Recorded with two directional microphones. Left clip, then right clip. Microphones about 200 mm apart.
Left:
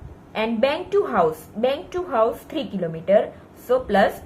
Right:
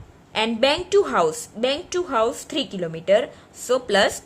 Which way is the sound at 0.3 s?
60° right (ahead or behind).